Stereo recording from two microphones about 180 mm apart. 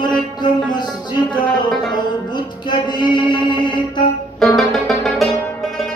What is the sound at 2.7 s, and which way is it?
Mantra, 25° left (ahead or behind).